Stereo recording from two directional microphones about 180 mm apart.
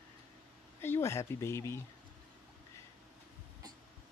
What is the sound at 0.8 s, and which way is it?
Speech, 15° left (ahead or behind).